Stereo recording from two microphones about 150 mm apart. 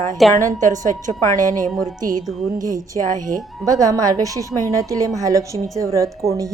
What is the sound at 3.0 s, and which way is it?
Speech, 60° right (ahead or behind).